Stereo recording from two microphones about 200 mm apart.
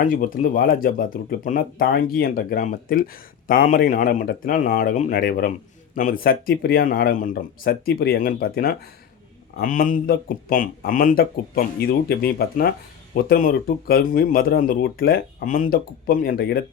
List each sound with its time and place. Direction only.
0.0 s speech: 45° left (ahead or behind)